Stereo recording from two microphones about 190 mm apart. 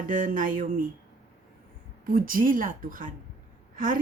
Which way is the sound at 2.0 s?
50° right (ahead or behind).